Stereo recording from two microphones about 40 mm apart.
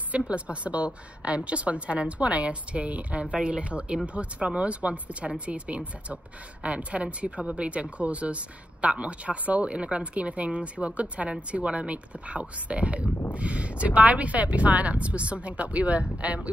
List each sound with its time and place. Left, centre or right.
0.2 s speech: right